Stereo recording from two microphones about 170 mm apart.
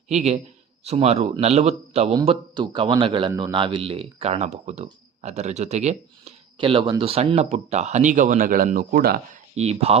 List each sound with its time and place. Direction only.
0.1 s a man's voice: 40° right (ahead or behind); by 9.4 s 65° right (ahead or behind)
9.6 s a man's voice: 40° right (ahead or behind)